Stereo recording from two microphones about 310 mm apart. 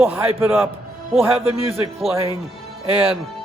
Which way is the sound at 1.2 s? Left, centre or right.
Centre.